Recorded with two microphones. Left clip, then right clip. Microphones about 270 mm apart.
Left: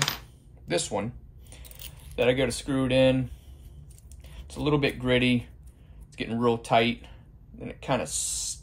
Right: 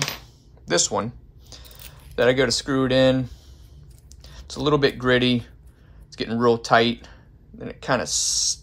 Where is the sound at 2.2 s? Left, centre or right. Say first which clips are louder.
Right 6 dB; right.